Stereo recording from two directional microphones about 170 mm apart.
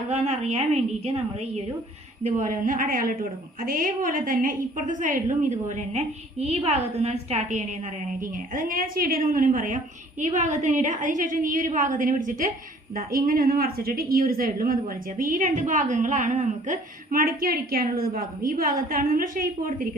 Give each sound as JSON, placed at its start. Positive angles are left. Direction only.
{"t": 0.1, "sound": "a woman's voice", "side_deg": -40}
{"t": 8.2, "sound": "a woman's voice", "side_deg": -55}